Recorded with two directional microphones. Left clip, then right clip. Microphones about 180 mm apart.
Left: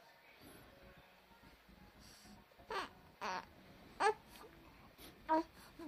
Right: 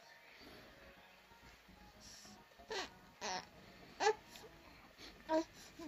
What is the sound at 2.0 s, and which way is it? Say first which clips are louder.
Music: right 4 dB; 25° left (ahead or behind).